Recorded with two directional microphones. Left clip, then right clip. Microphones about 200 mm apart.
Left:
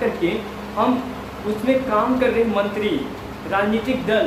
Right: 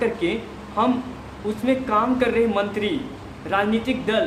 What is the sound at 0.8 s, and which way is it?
Speech, 15° right (ahead or behind).